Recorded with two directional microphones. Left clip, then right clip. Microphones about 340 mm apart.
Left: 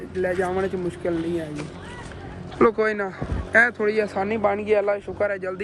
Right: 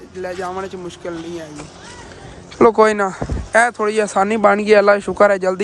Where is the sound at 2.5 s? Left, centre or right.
Centre.